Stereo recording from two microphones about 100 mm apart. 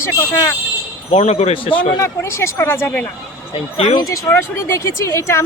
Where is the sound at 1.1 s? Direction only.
90° left; by 2.0 s 55° left (ahead or behind).